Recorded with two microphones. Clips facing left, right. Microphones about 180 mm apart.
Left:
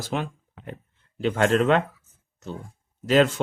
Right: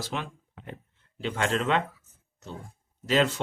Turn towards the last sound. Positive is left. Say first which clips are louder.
# left 5 dB
turn(degrees=50)  # may be behind; listen again after turning